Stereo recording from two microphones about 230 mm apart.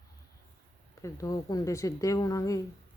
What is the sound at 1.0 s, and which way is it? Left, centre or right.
Speech, centre.